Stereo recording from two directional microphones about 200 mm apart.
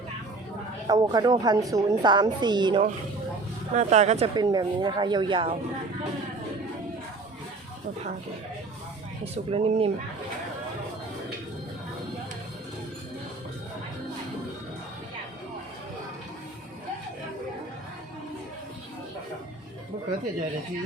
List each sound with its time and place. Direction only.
0.9 s a woman's voice: 20° right (ahead or behind)
3.8 s speech: 35° right (ahead or behind)
4.4 s a woman's voice: 20° right (ahead or behind)
9.2 s a woman's voice: 30° right (ahead or behind)